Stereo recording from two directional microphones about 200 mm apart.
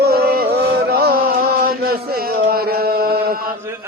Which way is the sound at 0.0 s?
50° right (ahead or behind).